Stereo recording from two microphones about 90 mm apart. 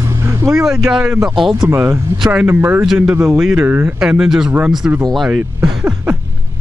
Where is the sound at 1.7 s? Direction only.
30° right (ahead or behind).